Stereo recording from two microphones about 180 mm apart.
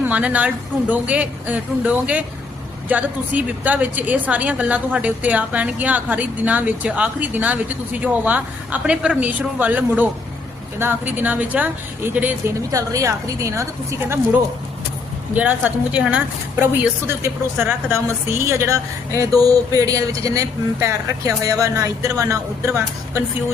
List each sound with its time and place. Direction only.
0.0 s a woman's voice: 10° right (ahead or behind)
15.4 s a woman's voice: 10° right (ahead or behind)